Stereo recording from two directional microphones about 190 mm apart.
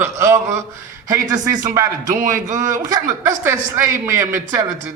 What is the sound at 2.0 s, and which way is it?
Speech, 40° right (ahead or behind).